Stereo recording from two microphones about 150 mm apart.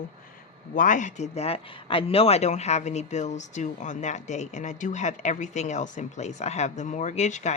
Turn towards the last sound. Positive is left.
turn(degrees=50)  # may be behind; listen again after turning